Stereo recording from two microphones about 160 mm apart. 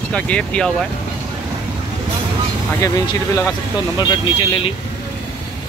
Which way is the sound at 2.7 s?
20° left (ahead or behind).